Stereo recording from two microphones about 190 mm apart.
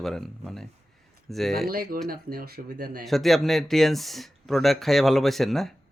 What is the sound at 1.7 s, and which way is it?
Speech, 50° right (ahead or behind).